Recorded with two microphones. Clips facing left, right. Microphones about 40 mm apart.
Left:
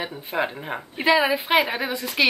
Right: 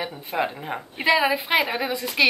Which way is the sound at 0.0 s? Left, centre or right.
Centre.